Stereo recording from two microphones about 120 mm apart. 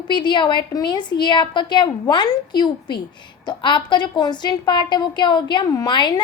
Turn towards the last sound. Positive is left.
turn(degrees=40)  # may be behind; listen again after turning